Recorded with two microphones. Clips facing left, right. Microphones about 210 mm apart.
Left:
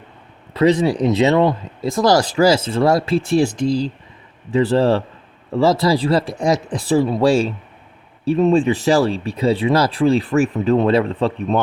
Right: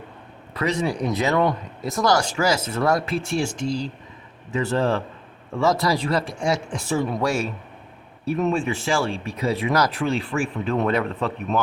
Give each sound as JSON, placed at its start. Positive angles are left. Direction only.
{"t": 0.5, "sound": "speech", "side_deg": 30}